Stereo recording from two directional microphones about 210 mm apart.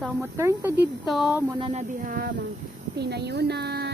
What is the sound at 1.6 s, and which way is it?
A woman's voice, 35° right (ahead or behind).